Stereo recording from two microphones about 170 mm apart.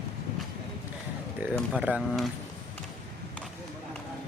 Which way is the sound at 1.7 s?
5° right (ahead or behind).